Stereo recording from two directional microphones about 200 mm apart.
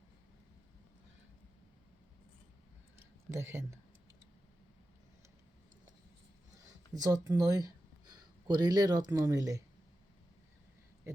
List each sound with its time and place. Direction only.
3.3 s speech: 10° right (ahead or behind)
6.7 s speech: 20° right (ahead or behind)